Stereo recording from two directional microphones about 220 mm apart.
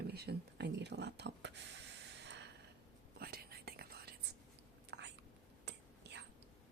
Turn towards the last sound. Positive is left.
turn(degrees=-50)  # may be behind; listen again after turning